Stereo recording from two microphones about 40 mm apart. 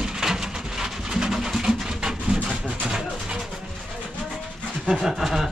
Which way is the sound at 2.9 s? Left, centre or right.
Centre.